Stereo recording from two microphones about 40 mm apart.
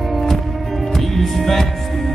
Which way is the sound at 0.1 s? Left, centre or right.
Centre.